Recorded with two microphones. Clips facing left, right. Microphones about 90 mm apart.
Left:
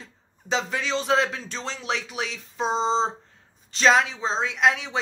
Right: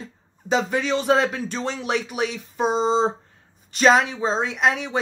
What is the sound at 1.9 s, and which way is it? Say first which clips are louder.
Speech: right 3 dB; 50° right (ahead or behind).